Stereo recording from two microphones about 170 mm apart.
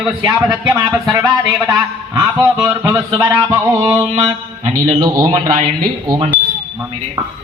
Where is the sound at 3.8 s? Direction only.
20° right (ahead or behind).